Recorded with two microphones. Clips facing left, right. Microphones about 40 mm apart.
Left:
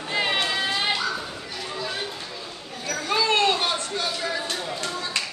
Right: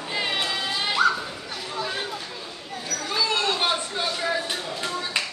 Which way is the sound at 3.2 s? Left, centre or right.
Left.